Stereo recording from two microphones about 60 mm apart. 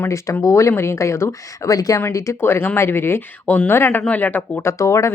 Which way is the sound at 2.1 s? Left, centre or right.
Left.